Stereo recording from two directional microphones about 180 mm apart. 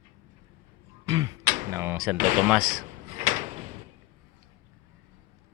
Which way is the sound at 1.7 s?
15° right (ahead or behind).